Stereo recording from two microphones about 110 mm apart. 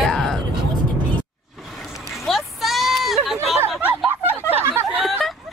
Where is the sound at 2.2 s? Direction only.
Centre (ahead or behind).